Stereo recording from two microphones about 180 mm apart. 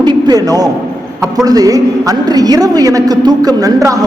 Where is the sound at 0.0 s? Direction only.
25° right (ahead or behind).